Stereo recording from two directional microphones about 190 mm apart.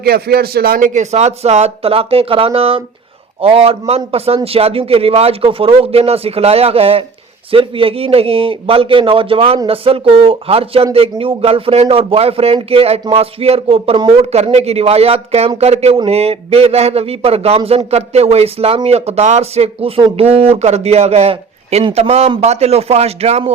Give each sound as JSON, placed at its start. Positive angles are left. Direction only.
{"t": 0.0, "sound": "a man's voice", "side_deg": -55}